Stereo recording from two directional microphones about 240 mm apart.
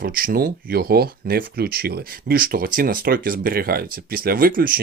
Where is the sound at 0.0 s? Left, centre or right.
Right.